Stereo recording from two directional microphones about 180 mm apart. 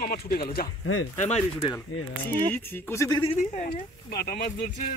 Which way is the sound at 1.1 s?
40° left (ahead or behind).